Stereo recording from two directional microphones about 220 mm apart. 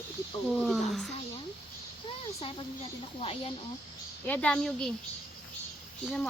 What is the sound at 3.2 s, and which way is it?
Speech, 25° left (ahead or behind).